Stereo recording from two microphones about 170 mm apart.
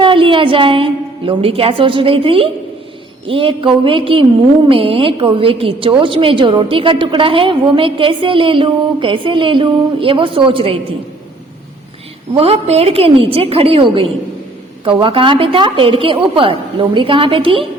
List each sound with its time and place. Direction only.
0.0 s a woman's voice: 30° right (ahead or behind)
12.3 s a woman's voice: 35° right (ahead or behind)